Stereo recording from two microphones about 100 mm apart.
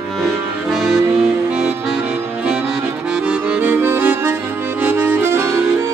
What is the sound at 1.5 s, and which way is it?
Music, 5° right (ahead or behind).